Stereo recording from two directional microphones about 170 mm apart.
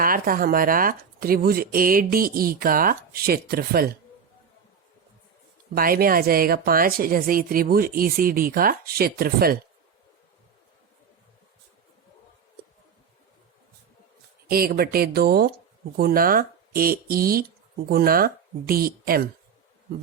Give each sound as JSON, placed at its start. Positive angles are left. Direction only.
{"t": 0.0, "sound": "speech", "side_deg": -55}
{"t": 5.7, "sound": "speech", "side_deg": -60}
{"t": 14.5, "sound": "speech", "side_deg": -60}